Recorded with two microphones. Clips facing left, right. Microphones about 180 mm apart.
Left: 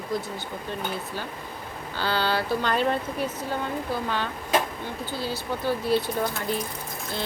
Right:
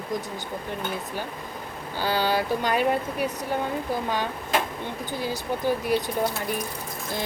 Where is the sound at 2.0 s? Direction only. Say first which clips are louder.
Right 2 dB; 15° right (ahead or behind).